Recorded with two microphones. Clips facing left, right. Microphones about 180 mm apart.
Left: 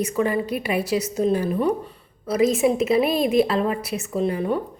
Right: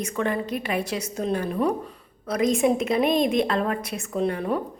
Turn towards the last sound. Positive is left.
turn(degrees=0)  # may be behind; listen again after turning